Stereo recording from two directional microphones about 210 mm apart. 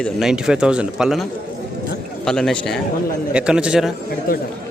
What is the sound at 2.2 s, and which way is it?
Speech, 5° left (ahead or behind).